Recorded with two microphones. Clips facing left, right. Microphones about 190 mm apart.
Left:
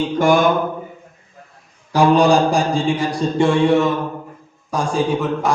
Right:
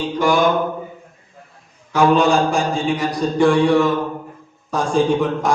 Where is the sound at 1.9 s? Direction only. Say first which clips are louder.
Left 1 dB; 35° left (ahead or behind).